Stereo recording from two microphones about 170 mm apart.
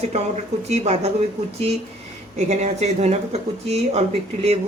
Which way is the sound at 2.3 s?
40° right (ahead or behind).